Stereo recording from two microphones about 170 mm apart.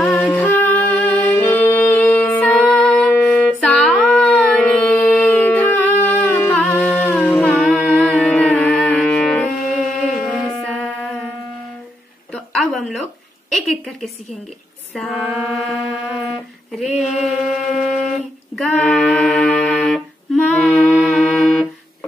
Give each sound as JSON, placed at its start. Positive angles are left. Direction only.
{"t": 0.4, "sound": "music", "side_deg": 15}
{"t": 7.3, "sound": "music", "side_deg": 0}
{"t": 12.3, "sound": "a sound", "side_deg": 0}
{"t": 13.7, "sound": "a woman's voice", "side_deg": 0}
{"t": 15.0, "sound": "mantra", "side_deg": 5}
{"t": 18.8, "sound": "music", "side_deg": 0}